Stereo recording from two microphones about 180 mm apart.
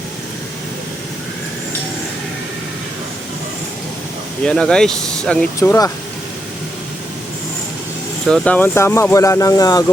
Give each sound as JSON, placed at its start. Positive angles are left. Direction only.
{"t": 4.4, "sound": "speech", "side_deg": 5}
{"t": 5.5, "sound": "speech", "side_deg": 15}
{"t": 8.3, "sound": "speech", "side_deg": 10}